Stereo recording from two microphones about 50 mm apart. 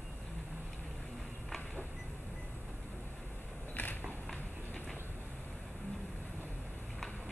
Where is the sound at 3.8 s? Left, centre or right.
Left.